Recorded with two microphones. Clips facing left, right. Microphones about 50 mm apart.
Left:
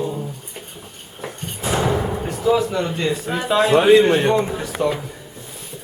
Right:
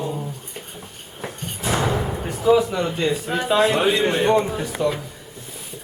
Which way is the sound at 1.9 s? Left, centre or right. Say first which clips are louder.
Left 3 dB; centre.